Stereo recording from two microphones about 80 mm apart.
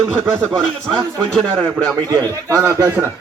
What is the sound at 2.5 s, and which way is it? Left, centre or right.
Speech, right.